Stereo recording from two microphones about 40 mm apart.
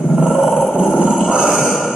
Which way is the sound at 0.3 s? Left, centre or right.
Centre.